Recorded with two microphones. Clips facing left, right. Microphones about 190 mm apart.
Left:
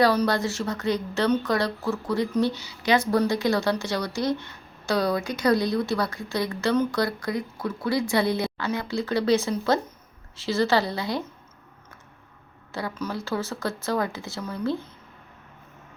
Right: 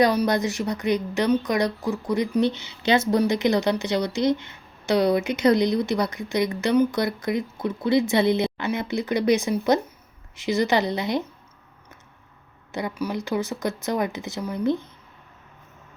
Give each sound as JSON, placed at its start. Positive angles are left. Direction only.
{"t": 0.0, "sound": "speech", "side_deg": -15}
{"t": 12.7, "sound": "speech", "side_deg": -15}